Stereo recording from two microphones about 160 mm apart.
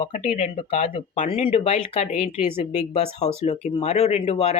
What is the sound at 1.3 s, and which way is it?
Speech, 40° left (ahead or behind).